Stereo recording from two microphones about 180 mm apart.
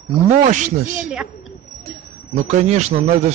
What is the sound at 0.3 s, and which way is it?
Speech, 45° right (ahead or behind).